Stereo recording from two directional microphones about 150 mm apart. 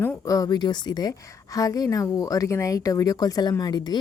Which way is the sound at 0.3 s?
25° left (ahead or behind).